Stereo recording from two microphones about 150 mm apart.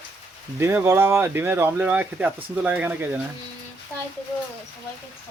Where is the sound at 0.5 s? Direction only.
15° right (ahead or behind).